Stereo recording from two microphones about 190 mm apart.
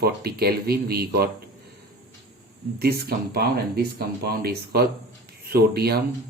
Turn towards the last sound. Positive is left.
turn(degrees=-55)  # may be behind; listen again after turning